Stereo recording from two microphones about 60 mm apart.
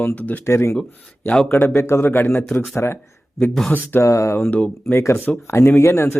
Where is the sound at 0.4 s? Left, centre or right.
Left.